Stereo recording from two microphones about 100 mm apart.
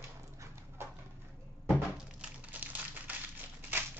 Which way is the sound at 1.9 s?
15° right (ahead or behind).